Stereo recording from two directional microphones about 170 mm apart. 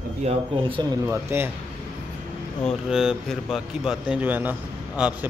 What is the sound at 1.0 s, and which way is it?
Speech, 10° right (ahead or behind).